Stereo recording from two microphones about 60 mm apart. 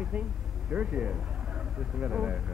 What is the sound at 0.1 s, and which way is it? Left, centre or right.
Speech, right.